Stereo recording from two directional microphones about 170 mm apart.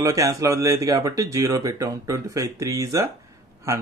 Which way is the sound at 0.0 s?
20° right (ahead or behind).